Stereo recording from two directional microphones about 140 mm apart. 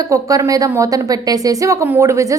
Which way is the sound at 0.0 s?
25° right (ahead or behind).